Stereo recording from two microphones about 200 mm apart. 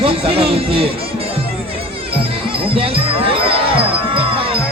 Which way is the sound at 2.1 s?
30° right (ahead or behind).